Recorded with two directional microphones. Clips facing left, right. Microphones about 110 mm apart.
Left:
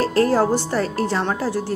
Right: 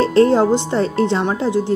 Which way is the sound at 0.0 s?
25° right (ahead or behind).